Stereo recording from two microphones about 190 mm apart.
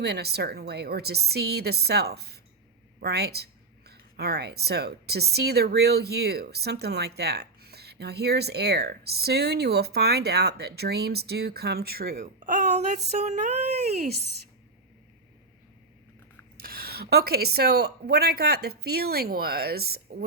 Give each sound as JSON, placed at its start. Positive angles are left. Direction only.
{"t": 0.0, "sound": "speech", "side_deg": -60}
{"t": 13.1, "sound": "a sound", "side_deg": -35}
{"t": 16.6, "sound": "speech", "side_deg": -50}